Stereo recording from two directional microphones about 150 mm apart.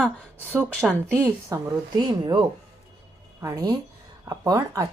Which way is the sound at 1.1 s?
15° right (ahead or behind).